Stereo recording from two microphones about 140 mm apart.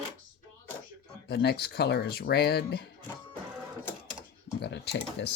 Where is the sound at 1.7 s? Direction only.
90° left.